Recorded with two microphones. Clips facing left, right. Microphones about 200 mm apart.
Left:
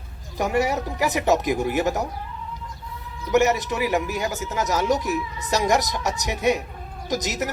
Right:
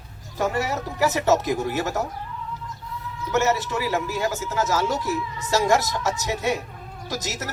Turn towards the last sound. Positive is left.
turn(degrees=15)  # may be behind; listen again after turning